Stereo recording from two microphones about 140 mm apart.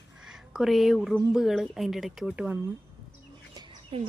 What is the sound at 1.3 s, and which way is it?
Speech, 5° right (ahead or behind).